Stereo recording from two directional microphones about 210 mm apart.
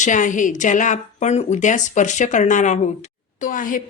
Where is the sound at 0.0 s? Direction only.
35° left (ahead or behind).